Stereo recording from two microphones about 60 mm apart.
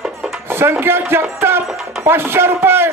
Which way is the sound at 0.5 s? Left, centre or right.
Right.